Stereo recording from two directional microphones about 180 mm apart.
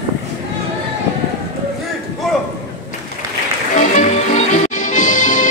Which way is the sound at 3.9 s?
40° left (ahead or behind).